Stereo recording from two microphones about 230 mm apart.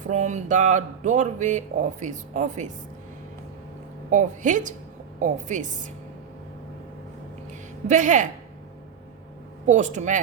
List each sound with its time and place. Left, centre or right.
0.1 s speech: right
4.1 s speech: right
7.9 s speech: right
9.6 s speech: right